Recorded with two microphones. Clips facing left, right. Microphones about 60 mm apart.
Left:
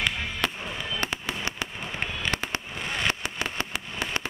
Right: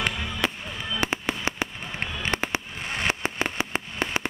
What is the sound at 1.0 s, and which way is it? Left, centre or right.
Fireworks, right.